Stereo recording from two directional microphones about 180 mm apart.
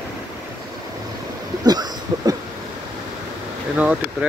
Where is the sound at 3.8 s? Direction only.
5° right (ahead or behind).